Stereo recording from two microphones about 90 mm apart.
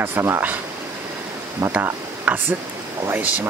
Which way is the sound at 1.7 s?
20° right (ahead or behind).